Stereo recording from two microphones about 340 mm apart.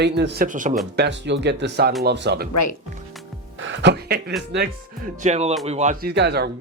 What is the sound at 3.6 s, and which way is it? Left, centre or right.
Speech, right.